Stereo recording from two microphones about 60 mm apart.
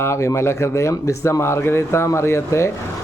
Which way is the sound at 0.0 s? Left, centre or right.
Left.